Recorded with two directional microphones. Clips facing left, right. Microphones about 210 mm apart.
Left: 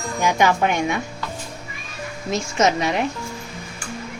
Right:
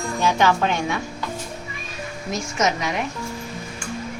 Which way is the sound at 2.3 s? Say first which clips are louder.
Left 4 dB; 30° left (ahead or behind).